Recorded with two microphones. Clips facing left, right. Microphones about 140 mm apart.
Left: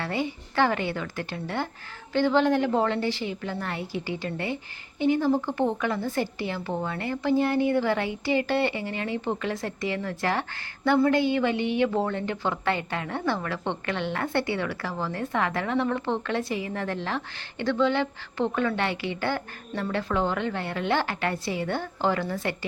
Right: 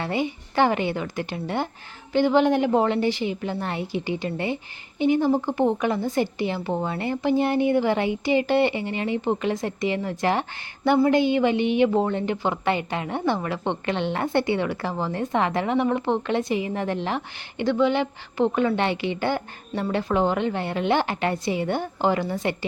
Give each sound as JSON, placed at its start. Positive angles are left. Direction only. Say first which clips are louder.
{"t": 0.0, "sound": "a woman's voice", "louder": "right 3 dB", "side_deg": -20}